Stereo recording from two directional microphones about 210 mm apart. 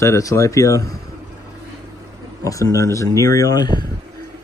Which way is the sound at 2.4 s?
15° left (ahead or behind).